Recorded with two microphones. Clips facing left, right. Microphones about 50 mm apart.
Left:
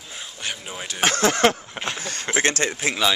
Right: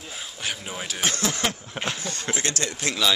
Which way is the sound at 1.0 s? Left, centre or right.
Left.